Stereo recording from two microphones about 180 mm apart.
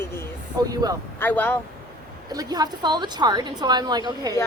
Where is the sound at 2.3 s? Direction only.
20° right (ahead or behind).